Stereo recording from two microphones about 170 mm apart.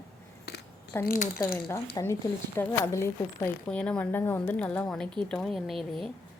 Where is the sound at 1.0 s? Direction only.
55° left (ahead or behind).